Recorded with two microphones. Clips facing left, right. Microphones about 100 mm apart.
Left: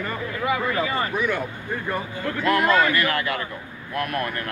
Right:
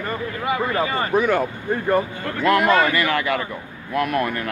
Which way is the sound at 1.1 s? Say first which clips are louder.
Right 6 dB; 45° right (ahead or behind).